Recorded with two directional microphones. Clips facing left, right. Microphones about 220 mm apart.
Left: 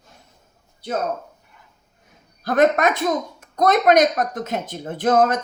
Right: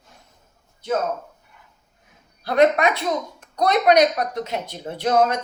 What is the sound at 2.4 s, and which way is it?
Speech, 45° left (ahead or behind).